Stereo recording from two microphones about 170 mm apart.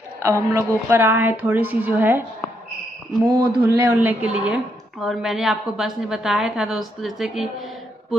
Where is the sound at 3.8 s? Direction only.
10° right (ahead or behind).